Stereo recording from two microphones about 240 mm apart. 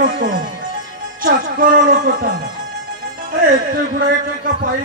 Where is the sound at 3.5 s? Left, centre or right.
Right.